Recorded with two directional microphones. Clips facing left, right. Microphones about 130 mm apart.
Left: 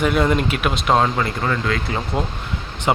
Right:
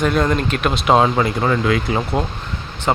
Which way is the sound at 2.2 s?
5° left (ahead or behind).